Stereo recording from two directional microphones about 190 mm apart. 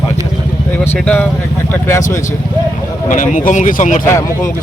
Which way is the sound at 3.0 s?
45° left (ahead or behind).